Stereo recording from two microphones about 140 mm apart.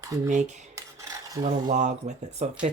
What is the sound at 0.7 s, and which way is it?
Filing, 25° right (ahead or behind).